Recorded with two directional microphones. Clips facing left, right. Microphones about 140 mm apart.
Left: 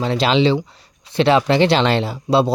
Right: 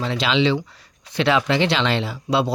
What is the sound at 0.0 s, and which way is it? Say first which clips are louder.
Speech: left 4 dB; 40° left (ahead or behind).